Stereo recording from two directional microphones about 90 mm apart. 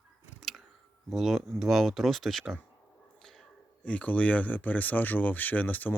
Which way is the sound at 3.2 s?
5° left (ahead or behind).